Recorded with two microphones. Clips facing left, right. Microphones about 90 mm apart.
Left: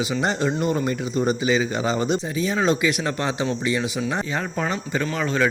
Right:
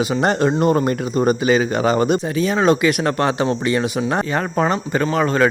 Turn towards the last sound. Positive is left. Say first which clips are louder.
# right 6 dB
turn(degrees=-50)  # may be behind; listen again after turning